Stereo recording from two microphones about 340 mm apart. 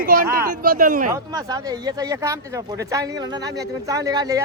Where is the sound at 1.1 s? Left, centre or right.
Centre.